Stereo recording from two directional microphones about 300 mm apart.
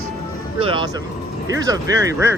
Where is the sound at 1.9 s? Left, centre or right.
Centre.